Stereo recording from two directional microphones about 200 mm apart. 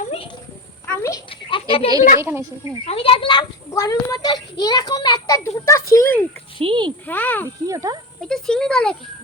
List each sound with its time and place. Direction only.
0.0 s a sound: 30° left (ahead or behind)
0.9 s a sound: 15° left (ahead or behind)
1.3 s a sound: 25° left (ahead or behind)
2.2 s speech: 10° right (ahead or behind)
2.8 s a child's voice: 30° left (ahead or behind)
3.7 s a child's voice: 15° left (ahead or behind)
6.6 s speech: 25° right (ahead or behind)
7.1 s speech: 10° left (ahead or behind)
7.7 s speech: 15° right (ahead or behind)
8.3 s speech: 5° left (ahead or behind)